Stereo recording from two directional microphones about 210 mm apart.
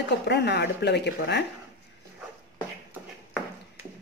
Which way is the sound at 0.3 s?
55° left (ahead or behind).